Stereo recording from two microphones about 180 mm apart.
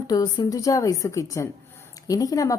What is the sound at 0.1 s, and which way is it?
A woman's voice, 20° left (ahead or behind).